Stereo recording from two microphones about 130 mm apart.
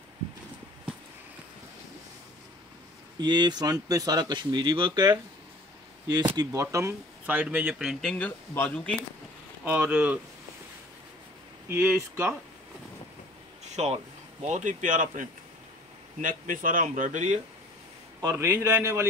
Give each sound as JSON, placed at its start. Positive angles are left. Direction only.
{"t": 3.2, "sound": "speech", "side_deg": -35}
{"t": 6.3, "sound": "speech", "side_deg": -25}
{"t": 9.7, "sound": "speech", "side_deg": -10}
{"t": 11.7, "sound": "speech", "side_deg": -15}
{"t": 13.7, "sound": "speech", "side_deg": -55}
{"t": 18.2, "sound": "a man's voice", "side_deg": -20}